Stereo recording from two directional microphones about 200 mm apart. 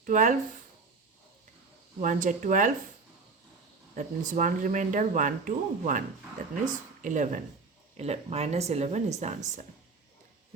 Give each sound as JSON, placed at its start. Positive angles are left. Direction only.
{"t": 0.0, "sound": "speech", "side_deg": -40}
{"t": 2.0, "sound": "speech", "side_deg": -40}
{"t": 4.3, "sound": "speech", "side_deg": -40}